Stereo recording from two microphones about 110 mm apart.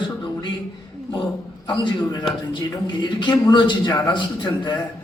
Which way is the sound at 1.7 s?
45° left (ahead or behind).